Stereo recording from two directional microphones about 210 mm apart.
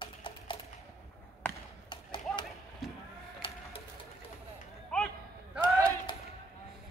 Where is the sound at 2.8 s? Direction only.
Centre (ahead or behind).